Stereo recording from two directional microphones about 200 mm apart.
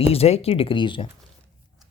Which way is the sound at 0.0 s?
30° left (ahead or behind).